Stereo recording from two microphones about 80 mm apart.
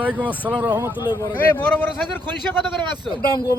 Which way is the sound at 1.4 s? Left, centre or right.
Left.